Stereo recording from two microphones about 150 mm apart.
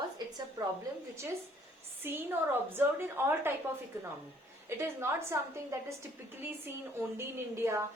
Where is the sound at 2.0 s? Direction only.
15° right (ahead or behind).